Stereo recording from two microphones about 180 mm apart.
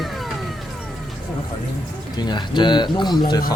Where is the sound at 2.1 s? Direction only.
25° left (ahead or behind).